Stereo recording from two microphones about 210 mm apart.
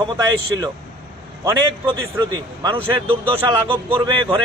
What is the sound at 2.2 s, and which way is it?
Speech, 20° right (ahead or behind).